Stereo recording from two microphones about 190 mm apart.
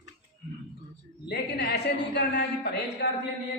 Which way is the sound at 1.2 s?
55° left (ahead or behind).